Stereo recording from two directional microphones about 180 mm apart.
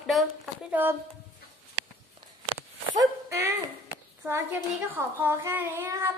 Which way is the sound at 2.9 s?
15° right (ahead or behind).